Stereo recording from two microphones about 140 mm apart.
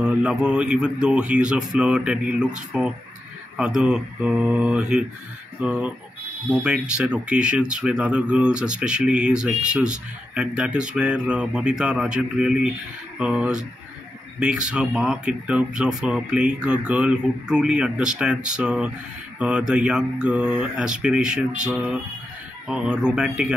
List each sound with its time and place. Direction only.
0.0 s speech: 5° right (ahead or behind)